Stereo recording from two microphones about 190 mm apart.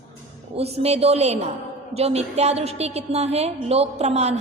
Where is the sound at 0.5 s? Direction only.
35° right (ahead or behind).